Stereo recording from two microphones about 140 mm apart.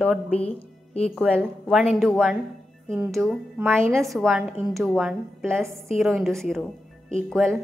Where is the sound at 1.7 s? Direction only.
5° right (ahead or behind).